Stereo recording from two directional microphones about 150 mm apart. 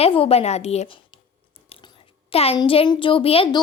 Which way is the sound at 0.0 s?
40° left (ahead or behind).